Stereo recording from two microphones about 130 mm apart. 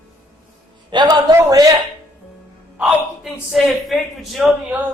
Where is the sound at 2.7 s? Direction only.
5° right (ahead or behind).